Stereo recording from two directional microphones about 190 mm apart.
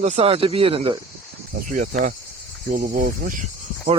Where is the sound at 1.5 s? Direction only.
50° right (ahead or behind).